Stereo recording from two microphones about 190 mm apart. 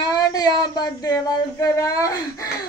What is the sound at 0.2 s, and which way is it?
Speech, 20° left (ahead or behind).